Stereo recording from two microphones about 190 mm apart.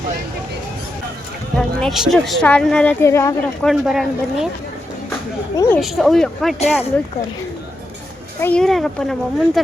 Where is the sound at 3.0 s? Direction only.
15° left (ahead or behind).